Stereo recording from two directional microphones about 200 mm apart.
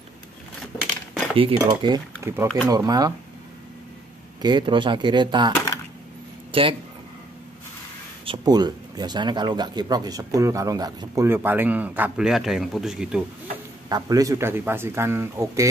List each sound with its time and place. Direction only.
1.3 s speech: 25° right (ahead or behind)
2.1 s speech: 10° right (ahead or behind)
4.4 s speech: 20° right (ahead or behind)
6.5 s speech: 25° right (ahead or behind)
8.3 s speech: 20° right (ahead or behind); by 13.2 s 5° right (ahead or behind)
13.8 s speech: 20° right (ahead or behind)